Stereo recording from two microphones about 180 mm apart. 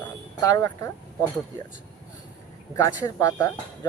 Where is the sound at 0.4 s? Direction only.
20° left (ahead or behind).